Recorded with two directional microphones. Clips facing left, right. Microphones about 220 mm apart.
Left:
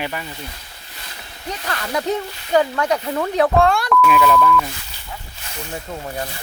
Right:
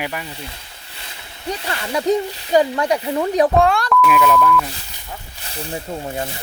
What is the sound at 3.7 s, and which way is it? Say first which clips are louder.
Speech: even; centre (ahead or behind).